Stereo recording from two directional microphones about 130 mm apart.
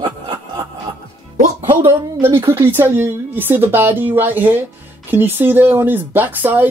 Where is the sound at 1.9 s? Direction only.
15° right (ahead or behind).